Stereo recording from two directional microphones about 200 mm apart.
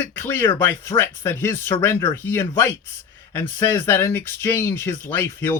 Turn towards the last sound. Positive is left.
turn(degrees=10)  # may be behind; listen again after turning